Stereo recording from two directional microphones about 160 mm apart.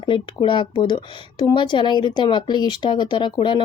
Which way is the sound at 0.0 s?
30° left (ahead or behind).